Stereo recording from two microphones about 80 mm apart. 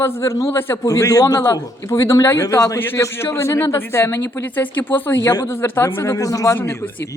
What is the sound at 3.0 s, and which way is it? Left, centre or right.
A woman's voice, left.